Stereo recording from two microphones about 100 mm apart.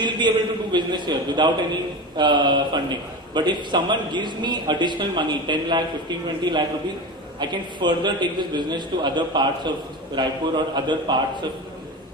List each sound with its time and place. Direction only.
0.0 s a man's voice: 50° right (ahead or behind)